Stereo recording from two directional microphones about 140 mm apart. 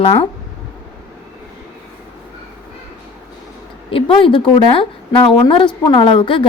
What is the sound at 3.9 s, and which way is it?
A woman's voice, 40° left (ahead or behind).